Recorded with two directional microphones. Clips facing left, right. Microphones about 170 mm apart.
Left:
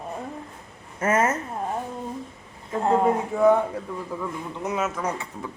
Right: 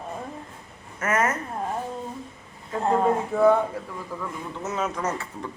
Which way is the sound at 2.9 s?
15° left (ahead or behind).